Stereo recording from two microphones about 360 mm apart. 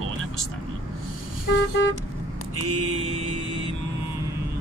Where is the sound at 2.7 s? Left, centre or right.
Right.